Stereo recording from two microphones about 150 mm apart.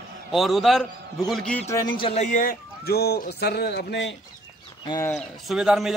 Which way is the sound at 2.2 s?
65° left (ahead or behind).